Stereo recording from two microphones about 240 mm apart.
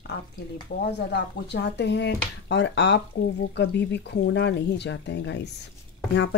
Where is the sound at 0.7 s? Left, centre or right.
Left.